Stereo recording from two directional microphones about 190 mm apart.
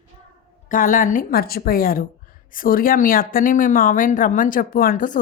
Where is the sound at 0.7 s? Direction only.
45° left (ahead or behind).